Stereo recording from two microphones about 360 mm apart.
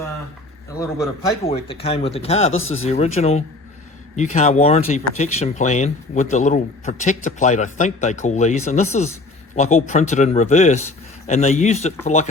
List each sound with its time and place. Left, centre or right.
1.5 s speech: centre
2.5 s speech: left
2.8 s speech: centre